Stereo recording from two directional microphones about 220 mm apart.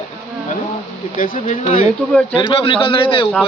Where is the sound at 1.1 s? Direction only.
35° left (ahead or behind).